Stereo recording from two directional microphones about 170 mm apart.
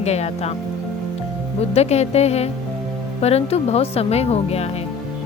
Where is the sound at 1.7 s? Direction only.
40° left (ahead or behind).